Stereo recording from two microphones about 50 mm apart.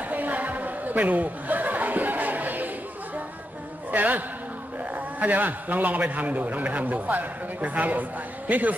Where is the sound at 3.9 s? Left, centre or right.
Right.